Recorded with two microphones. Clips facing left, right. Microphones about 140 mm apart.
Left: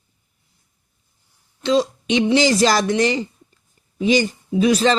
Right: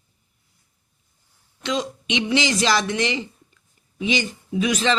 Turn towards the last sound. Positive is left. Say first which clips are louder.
# left 5 dB
turn(degrees=35)  # may be behind; listen again after turning